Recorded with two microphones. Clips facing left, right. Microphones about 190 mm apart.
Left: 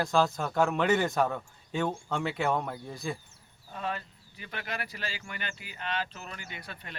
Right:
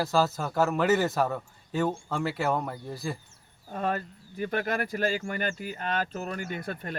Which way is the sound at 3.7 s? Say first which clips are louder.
Right 6 dB; 45° right (ahead or behind).